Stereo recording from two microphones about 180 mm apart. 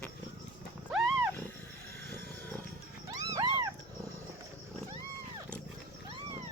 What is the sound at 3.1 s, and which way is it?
Wild animals, 20° right (ahead or behind).